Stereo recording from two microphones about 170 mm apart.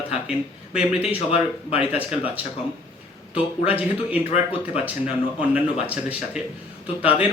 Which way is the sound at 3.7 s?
10° right (ahead or behind).